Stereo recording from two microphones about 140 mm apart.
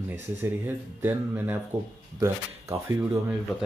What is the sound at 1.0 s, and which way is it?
Speech, 15° right (ahead or behind).